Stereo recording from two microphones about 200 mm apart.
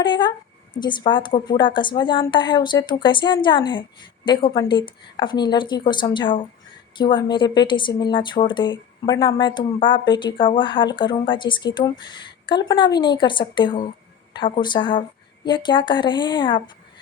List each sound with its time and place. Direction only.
0.0 s a woman's voice: 20° left (ahead or behind)